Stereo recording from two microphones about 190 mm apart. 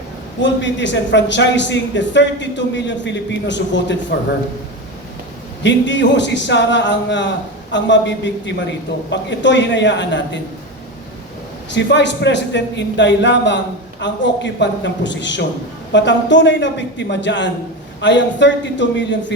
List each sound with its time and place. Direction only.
0.4 s a man's voice: 70° left (ahead or behind)
5.6 s a man's voice: 70° left (ahead or behind)
11.7 s a man's voice: 65° left (ahead or behind)